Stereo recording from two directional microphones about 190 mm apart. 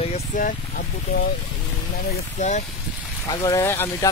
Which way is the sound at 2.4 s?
40° left (ahead or behind).